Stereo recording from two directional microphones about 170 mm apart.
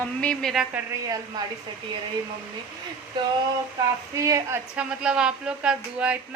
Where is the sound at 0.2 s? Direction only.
5° left (ahead or behind).